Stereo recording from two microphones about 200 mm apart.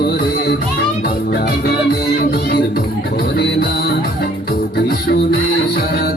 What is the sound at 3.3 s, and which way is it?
Music, 50° left (ahead or behind).